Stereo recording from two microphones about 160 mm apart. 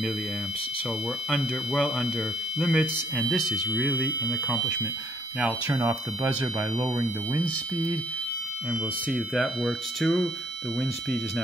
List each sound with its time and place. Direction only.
1.3 s speech: 5° left (ahead or behind)
5.9 s speech: 15° right (ahead or behind)
9.1 s speech: 5° left (ahead or behind)